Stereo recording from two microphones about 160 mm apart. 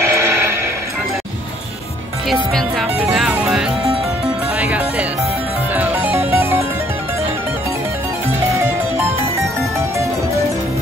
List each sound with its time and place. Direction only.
0.0 s music: 15° right (ahead or behind)
2.2 s speech: centre (ahead or behind)
5.8 s music: 10° right (ahead or behind)